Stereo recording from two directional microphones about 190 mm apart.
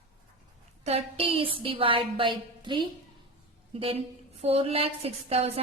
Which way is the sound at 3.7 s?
30° right (ahead or behind).